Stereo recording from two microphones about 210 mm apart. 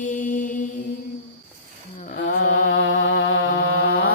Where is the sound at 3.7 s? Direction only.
70° left (ahead or behind).